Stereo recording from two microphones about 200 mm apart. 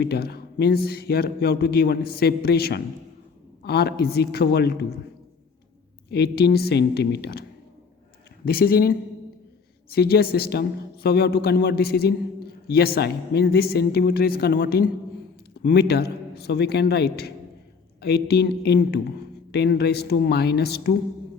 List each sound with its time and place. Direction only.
0.0 s speech: 55° left (ahead or behind)
6.1 s speech: 55° left (ahead or behind)
8.4 s speech: 50° left (ahead or behind)